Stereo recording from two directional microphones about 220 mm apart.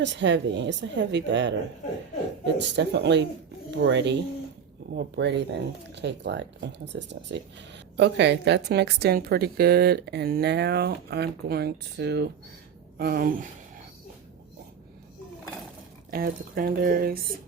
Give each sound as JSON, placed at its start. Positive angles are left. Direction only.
{"t": 0.0, "sound": "speech", "side_deg": -55}
{"t": 2.6, "sound": "speech", "side_deg": -50}
{"t": 16.1, "sound": "speech", "side_deg": -40}